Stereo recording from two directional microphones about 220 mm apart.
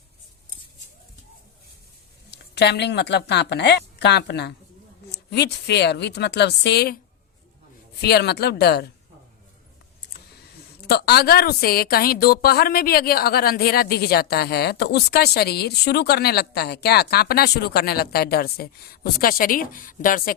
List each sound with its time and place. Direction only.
2.3 s a woman's voice: 50° left (ahead or behind)
8.0 s a woman's voice: 50° left (ahead or behind)
10.8 s a woman's voice: 50° left (ahead or behind)